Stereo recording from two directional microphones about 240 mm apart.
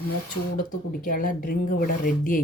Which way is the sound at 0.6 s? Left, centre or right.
Left.